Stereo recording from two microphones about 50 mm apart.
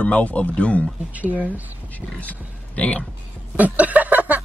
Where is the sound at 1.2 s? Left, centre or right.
Right.